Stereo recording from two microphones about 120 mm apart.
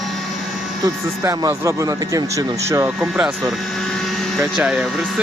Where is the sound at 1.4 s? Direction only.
30° right (ahead or behind).